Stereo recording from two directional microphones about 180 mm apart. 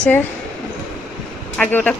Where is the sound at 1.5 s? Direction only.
5° left (ahead or behind).